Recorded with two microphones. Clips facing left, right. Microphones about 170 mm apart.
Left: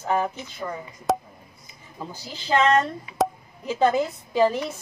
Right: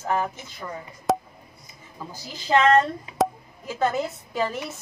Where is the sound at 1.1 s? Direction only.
Centre (ahead or behind).